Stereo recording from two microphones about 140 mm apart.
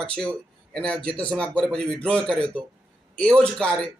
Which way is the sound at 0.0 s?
5° left (ahead or behind).